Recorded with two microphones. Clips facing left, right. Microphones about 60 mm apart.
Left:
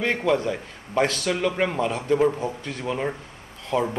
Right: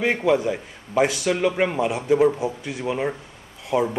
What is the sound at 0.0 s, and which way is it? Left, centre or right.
A man's voice, centre.